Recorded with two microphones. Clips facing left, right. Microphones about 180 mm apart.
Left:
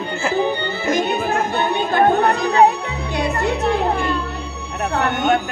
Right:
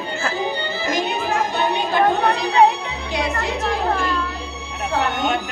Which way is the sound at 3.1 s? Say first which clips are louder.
Left 3 dB; 55° left (ahead or behind).